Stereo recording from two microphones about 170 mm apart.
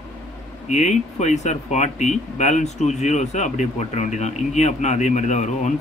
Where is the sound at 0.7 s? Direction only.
40° left (ahead or behind).